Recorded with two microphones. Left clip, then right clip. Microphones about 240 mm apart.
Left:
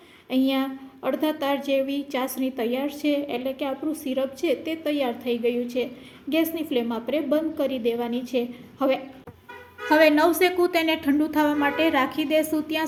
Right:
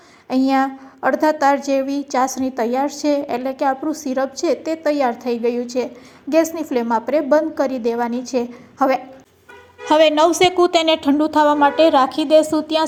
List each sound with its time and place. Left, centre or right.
0.3 s a woman's voice: centre
9.8 s a woman's voice: right